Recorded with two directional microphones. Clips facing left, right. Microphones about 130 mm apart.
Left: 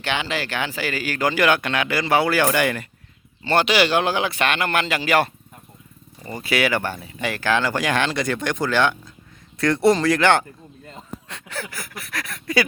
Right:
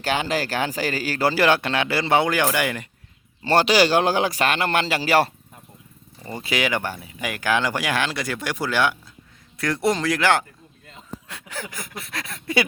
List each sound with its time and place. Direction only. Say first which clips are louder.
0.0 s speech: right 2 dB; 40° right (ahead or behind); by 2.8 s 15° right (ahead or behind)
3.4 s speech: right 1 dB; 35° right (ahead or behind); by 10.4 s 5° right (ahead or behind)
11.3 s a sound: left 2 dB; 10° right (ahead or behind); by 12.6 s 25° right (ahead or behind)